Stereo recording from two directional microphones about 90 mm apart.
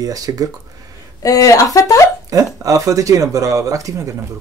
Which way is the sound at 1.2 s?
40° left (ahead or behind).